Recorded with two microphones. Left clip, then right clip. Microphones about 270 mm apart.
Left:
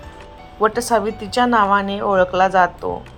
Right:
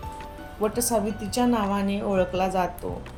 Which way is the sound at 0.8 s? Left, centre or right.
Centre.